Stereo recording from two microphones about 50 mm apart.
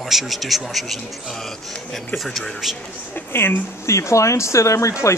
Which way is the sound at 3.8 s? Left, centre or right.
Left.